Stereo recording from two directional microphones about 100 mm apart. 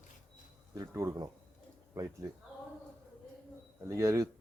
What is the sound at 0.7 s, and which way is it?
Speech, 30° right (ahead or behind).